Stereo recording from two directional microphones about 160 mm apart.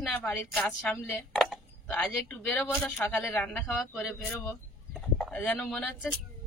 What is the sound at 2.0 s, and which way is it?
A woman's voice, 5° left (ahead or behind).